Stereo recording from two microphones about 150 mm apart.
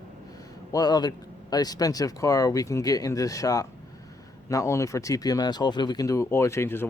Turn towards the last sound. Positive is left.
turn(degrees=15)  # may be behind; listen again after turning